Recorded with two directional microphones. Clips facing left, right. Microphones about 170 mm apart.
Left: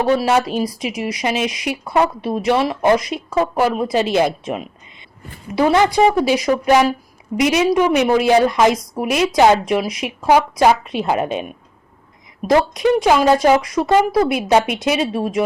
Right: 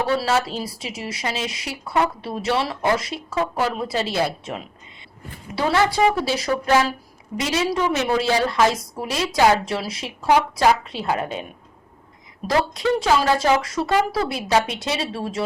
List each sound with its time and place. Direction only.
0.0 s a woman's voice: 15° left (ahead or behind)
12.7 s speech: 15° left (ahead or behind)